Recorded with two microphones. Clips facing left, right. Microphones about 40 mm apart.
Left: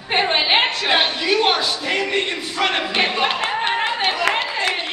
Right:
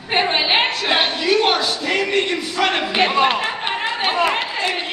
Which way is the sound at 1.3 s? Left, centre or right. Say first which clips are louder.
Right 2 dB; left.